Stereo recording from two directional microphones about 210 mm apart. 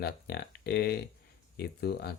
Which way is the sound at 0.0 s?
50° left (ahead or behind).